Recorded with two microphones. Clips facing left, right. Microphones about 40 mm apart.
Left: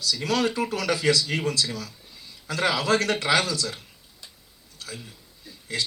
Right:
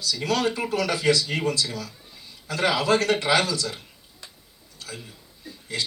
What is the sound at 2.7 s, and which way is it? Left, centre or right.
Speech, right.